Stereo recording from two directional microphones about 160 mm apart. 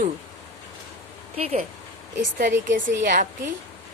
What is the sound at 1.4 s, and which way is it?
Speech, 40° right (ahead or behind).